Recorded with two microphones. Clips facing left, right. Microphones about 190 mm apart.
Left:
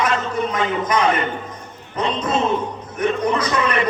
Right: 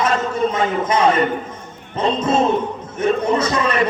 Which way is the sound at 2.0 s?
25° right (ahead or behind).